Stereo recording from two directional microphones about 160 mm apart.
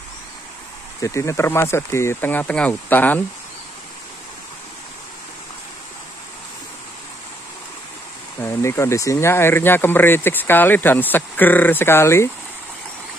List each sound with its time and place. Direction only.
1.0 s speech: 20° left (ahead or behind)
8.4 s speech: 15° left (ahead or behind)